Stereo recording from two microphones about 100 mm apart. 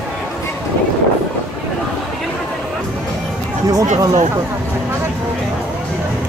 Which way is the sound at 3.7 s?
40° right (ahead or behind).